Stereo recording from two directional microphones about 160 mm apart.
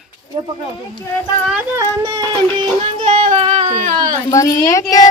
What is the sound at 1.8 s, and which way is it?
Speech, 20° right (ahead or behind).